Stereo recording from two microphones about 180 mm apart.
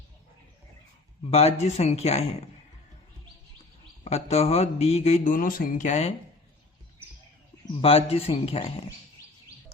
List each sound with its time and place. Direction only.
1.2 s speech: 35° left (ahead or behind)
4.0 s speech: 35° left (ahead or behind)
7.8 s speech: 30° left (ahead or behind)